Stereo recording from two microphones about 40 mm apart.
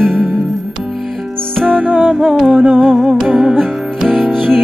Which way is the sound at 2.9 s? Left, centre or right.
Centre.